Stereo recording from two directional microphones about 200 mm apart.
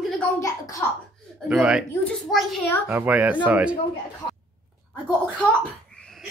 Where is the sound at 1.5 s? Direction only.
5° right (ahead or behind).